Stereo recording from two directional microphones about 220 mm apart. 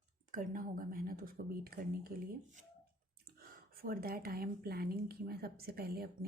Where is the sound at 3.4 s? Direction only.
40° right (ahead or behind).